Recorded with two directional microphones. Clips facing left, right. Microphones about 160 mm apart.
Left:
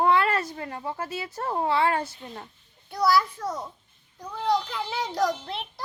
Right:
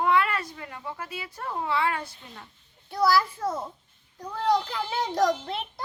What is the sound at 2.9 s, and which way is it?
Speech, centre (ahead or behind).